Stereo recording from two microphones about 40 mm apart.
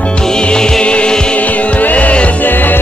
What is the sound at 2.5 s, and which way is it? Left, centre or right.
Music, left.